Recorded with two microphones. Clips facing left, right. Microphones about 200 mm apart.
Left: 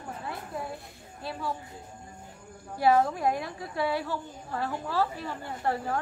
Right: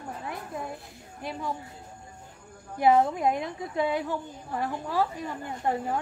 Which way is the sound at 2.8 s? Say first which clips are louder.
Right 2 dB; 20° right (ahead or behind).